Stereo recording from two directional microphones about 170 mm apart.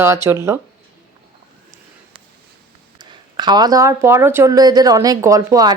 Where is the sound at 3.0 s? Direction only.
25° right (ahead or behind).